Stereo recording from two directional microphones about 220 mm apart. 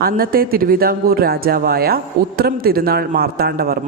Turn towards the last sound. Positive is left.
turn(degrees=-45)  # may be behind; listen again after turning